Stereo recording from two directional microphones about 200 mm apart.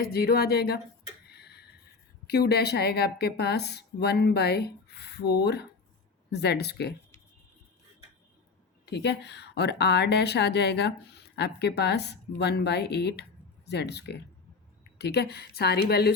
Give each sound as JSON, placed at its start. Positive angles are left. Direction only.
{"t": 0.0, "sound": "a woman's voice", "side_deg": 50}
{"t": 1.3, "sound": "a sound", "side_deg": 55}
{"t": 2.2, "sound": "speech", "side_deg": 55}
{"t": 8.9, "sound": "speech", "side_deg": 55}